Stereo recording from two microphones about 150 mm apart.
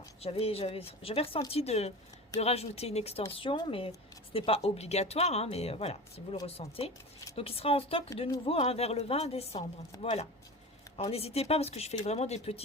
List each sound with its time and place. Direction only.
0.2 s speech: 40° left (ahead or behind)